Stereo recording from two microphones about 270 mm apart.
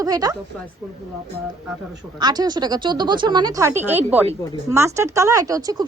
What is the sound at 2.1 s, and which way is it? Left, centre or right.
Speech, centre.